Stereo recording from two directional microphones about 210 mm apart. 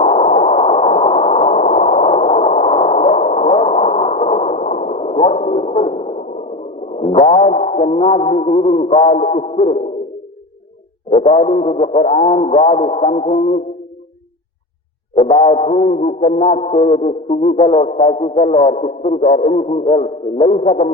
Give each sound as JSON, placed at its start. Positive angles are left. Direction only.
{"t": 0.0, "sound": "sine wave", "side_deg": 30}
{"t": 3.5, "sound": "a sound", "side_deg": 30}
{"t": 7.1, "sound": "music", "side_deg": 30}
{"t": 11.1, "sound": "music", "side_deg": 30}
{"t": 15.1, "sound": "music", "side_deg": 30}